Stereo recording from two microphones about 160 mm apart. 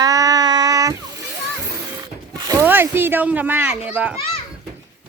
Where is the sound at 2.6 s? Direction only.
15° right (ahead or behind).